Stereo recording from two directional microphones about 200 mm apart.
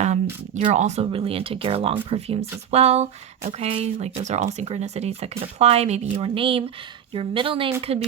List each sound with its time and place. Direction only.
0.0 s speech: 35° right (ahead or behind)